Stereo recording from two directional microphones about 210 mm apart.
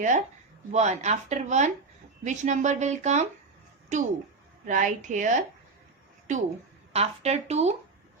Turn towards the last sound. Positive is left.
turn(degrees=-30)  # may be behind; listen again after turning